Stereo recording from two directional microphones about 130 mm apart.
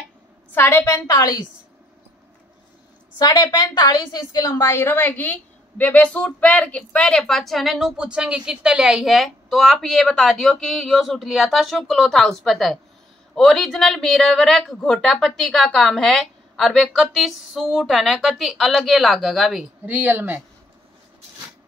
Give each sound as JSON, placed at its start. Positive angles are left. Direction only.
{"t": 0.5, "sound": "a woman's voice", "side_deg": 15}
{"t": 3.2, "sound": "a woman's voice", "side_deg": 30}
{"t": 19.9, "sound": "speech", "side_deg": -15}